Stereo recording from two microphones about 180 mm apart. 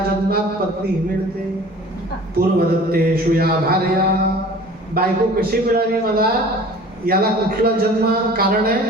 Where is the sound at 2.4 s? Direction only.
60° right (ahead or behind).